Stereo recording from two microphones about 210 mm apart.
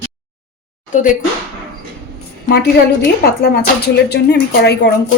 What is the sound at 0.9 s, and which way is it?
Speech, 40° left (ahead or behind).